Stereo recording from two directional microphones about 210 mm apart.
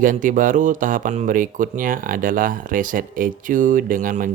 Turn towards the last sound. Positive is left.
turn(degrees=-40)  # may be behind; listen again after turning